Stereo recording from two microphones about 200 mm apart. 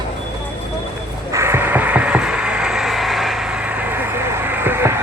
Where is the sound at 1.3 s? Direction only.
15° right (ahead or behind).